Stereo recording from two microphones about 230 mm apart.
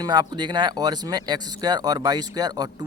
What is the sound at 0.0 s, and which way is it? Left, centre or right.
Speech, centre.